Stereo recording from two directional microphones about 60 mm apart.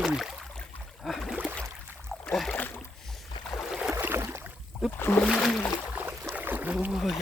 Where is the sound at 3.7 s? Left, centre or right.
Centre.